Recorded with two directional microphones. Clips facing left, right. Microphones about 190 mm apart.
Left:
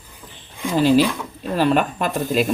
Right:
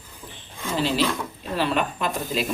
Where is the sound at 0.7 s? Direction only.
50° left (ahead or behind).